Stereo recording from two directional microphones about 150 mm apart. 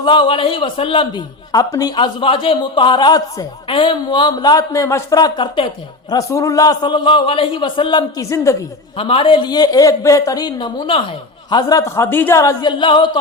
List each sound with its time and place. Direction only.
0.0 s a man's voice: 35° left (ahead or behind)
2.2 s a man's voice: 35° left (ahead or behind)
8.2 s a man's voice: 20° left (ahead or behind)
9.0 s a man's voice: 35° left (ahead or behind)
11.5 s a man's voice: 20° left (ahead or behind)